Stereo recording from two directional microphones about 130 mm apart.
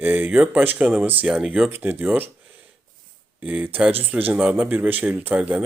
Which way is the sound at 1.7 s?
15° right (ahead or behind).